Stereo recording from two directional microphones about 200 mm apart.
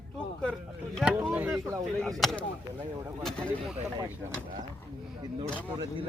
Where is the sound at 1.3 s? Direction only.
10° right (ahead or behind).